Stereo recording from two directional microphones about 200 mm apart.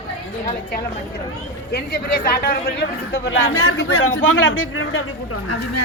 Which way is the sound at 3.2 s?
80° left.